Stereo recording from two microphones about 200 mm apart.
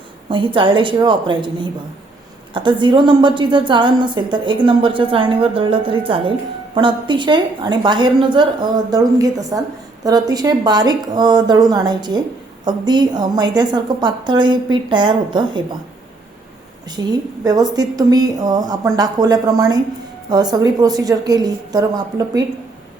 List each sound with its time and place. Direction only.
0.3 s a woman's voice: 25° right (ahead or behind)
17.0 s a woman's voice: 20° right (ahead or behind)